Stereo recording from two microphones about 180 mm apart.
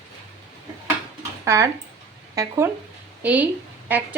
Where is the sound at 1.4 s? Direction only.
15° right (ahead or behind).